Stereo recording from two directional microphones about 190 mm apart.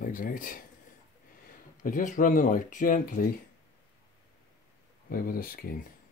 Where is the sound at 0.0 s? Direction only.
45° left (ahead or behind).